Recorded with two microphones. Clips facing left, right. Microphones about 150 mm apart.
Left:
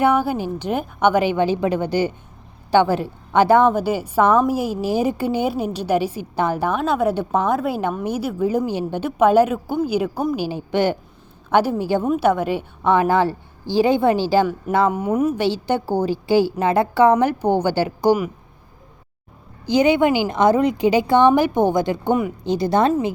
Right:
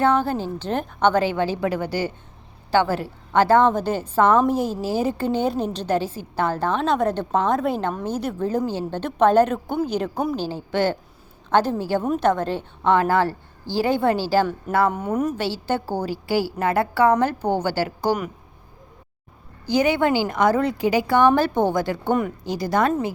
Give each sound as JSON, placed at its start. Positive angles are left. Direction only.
{"t": 0.0, "sound": "a woman's voice", "side_deg": 10}
{"t": 14.9, "sound": "a woman's voice", "side_deg": 10}
{"t": 19.6, "sound": "a woman's voice", "side_deg": 20}